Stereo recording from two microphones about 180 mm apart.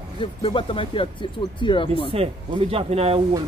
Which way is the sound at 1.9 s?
30° right (ahead or behind).